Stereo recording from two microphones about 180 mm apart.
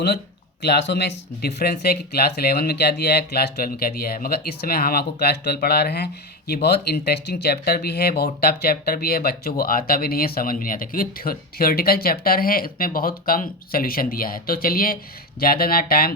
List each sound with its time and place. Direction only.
0.6 s speech: 70° left (ahead or behind)